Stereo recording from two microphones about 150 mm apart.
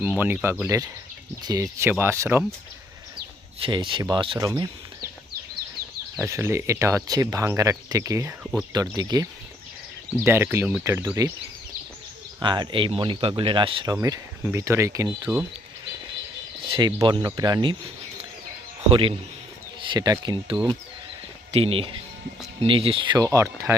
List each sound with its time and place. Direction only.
0.0 s speech: 15° right (ahead or behind)
3.6 s speech: 35° right (ahead or behind)
4.4 s speech: 25° right (ahead or behind)
6.1 s speech: 15° right (ahead or behind)
12.4 s speech: 30° right (ahead or behind)
16.6 s speech: 35° right (ahead or behind)
18.9 s speech: 35° right (ahead or behind)
23.1 s speech: 20° right (ahead or behind)